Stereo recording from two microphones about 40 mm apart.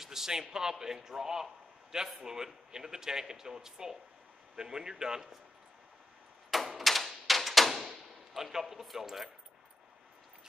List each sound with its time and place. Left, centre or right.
0.0 s a man's voice: centre
6.5 s a sound: centre
8.3 s speech: centre